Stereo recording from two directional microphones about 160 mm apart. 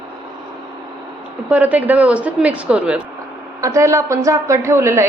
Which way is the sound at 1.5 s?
10° right (ahead or behind).